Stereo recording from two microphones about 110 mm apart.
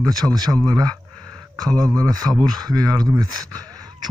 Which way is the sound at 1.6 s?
5° left (ahead or behind).